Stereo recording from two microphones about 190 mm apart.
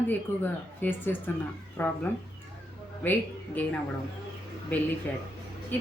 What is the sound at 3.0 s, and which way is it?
Speech, 10° left (ahead or behind).